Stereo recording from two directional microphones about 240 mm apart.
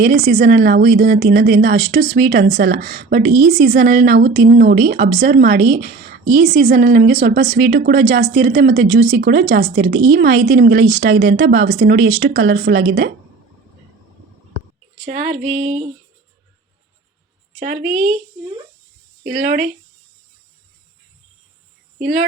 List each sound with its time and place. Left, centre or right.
0.0 s a woman's voice: right
15.0 s a woman's voice: right
17.7 s a woman's voice: right
19.2 s a woman's voice: right
21.9 s speech: right